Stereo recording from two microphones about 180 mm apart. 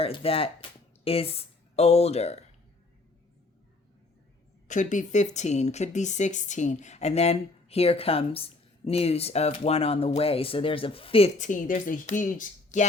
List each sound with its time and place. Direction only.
0.0 s speech: 30° left (ahead or behind)
4.7 s speech: 45° left (ahead or behind)